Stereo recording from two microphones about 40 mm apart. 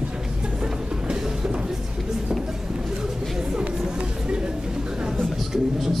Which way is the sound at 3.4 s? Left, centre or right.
Centre.